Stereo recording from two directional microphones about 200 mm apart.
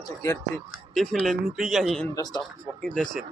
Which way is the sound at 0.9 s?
Centre (ahead or behind).